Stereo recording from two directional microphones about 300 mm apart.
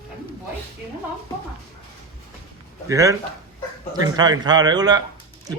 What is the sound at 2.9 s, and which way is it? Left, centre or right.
Speech, centre.